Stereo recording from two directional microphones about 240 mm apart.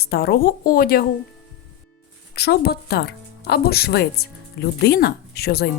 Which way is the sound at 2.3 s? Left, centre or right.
Left.